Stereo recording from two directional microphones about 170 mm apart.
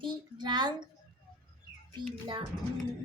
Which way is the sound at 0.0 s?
25° right (ahead or behind).